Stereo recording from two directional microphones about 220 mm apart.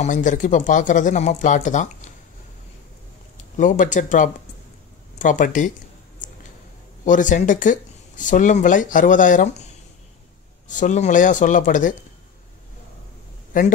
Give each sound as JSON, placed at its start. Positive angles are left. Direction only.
{"t": 0.0, "sound": "speech", "side_deg": 35}
{"t": 3.5, "sound": "speech", "side_deg": 35}
{"t": 7.1, "sound": "speech", "side_deg": 35}
{"t": 10.7, "sound": "speech", "side_deg": 35}
{"t": 13.5, "sound": "speech", "side_deg": 35}